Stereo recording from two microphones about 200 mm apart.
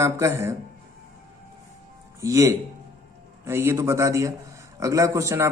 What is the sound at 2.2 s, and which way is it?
A man's voice, 15° right (ahead or behind).